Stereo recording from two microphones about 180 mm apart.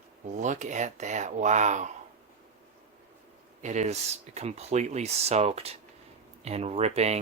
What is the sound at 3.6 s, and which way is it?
Speech, 40° right (ahead or behind).